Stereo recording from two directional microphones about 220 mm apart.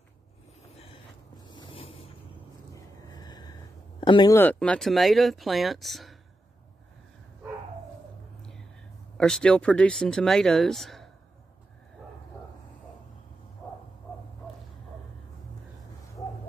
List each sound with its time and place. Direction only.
1.5 s a sound: 20° left (ahead or behind)
4.0 s speech: 20° left (ahead or behind)
4.4 s speech: 5° left (ahead or behind)
9.2 s speech: 5° left (ahead or behind)